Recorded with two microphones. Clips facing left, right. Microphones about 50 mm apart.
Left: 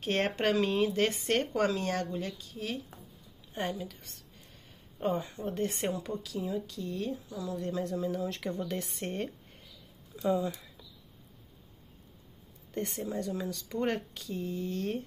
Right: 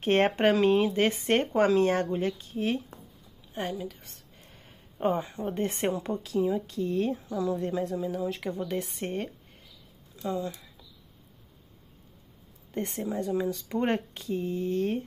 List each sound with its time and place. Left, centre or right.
0.0 s speech: right
3.5 s a woman's voice: centre
4.5 s speech: right
7.8 s a woman's voice: centre
9.0 s a sound: centre
10.2 s speech: centre
12.7 s speech: right